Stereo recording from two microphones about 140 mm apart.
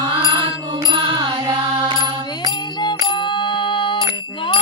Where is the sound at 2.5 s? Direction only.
30° left (ahead or behind).